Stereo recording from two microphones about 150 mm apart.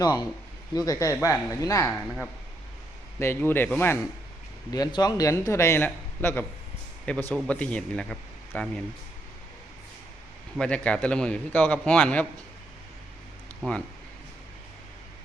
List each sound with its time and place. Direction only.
0.0 s a man's voice: 25° left (ahead or behind)
1.9 s speech: centre (ahead or behind)
3.2 s a man's voice: 15° left (ahead or behind)
4.7 s a man's voice: 25° left (ahead or behind); by 8.8 s 5° left (ahead or behind)
10.6 s a man's voice: 5° left (ahead or behind)